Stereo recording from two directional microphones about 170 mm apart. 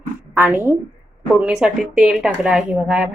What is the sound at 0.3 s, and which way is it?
Speech, 10° right (ahead or behind).